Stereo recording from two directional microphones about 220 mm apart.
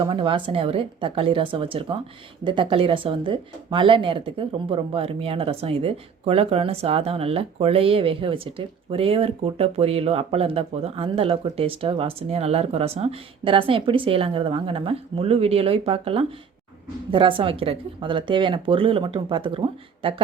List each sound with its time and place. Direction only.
0.0 s speech: 25° right (ahead or behind)